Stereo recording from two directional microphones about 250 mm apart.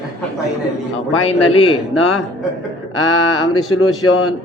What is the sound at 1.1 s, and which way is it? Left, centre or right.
Speech, left.